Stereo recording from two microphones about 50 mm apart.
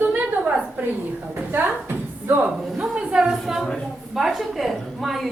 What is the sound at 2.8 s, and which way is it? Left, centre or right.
Speech, centre.